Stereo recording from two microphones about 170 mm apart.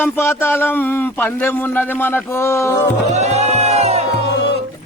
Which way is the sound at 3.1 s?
40° right (ahead or behind).